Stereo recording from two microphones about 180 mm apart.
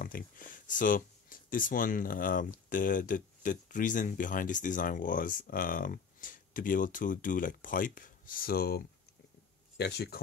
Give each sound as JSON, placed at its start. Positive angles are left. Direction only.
{"t": 0.0, "sound": "speech", "side_deg": 50}